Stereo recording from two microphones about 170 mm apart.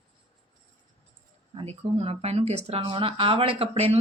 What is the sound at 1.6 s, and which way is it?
Speech, 35° right (ahead or behind).